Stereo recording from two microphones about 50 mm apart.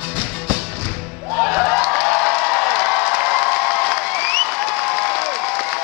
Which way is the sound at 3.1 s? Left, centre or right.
Centre.